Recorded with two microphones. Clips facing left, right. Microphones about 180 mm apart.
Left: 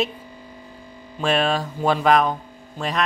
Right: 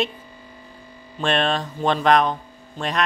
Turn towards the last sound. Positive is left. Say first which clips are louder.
# even
turn(degrees=0)  # may be behind; listen again after turning